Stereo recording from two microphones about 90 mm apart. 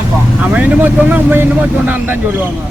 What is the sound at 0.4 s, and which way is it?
Speech, 15° right (ahead or behind).